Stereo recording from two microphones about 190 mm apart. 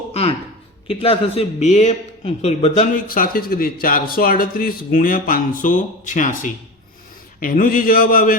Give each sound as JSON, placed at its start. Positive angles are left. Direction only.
{"t": 0.1, "sound": "a sound", "side_deg": 30}
{"t": 0.9, "sound": "a man's voice", "side_deg": 30}
{"t": 2.9, "sound": "speech", "side_deg": 45}